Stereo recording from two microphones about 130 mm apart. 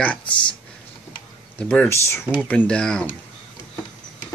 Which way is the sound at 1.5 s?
10° left (ahead or behind).